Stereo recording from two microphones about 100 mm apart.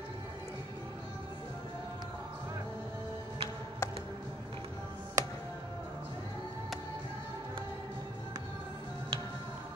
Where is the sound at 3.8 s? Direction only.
30° left (ahead or behind).